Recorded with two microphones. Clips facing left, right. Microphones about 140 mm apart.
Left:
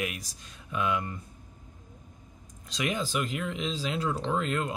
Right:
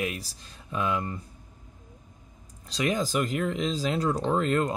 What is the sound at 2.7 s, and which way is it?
Speech, 40° right (ahead or behind).